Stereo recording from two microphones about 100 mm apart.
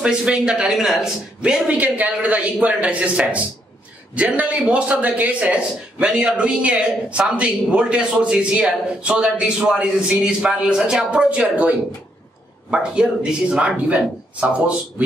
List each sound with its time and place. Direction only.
0.0 s a man's voice: 10° right (ahead or behind)
12.7 s a man's voice: 10° right (ahead or behind)